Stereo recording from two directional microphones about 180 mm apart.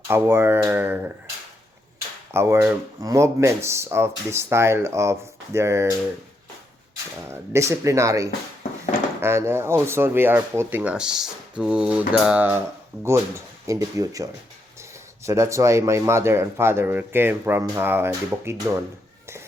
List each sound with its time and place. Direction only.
0.1 s speech: 15° right (ahead or behind)
2.3 s speech: 15° right (ahead or behind)
7.3 s speech: 15° right (ahead or behind)